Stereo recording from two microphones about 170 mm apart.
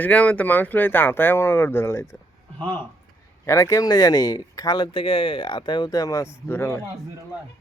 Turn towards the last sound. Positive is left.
turn(degrees=15)  # may be behind; listen again after turning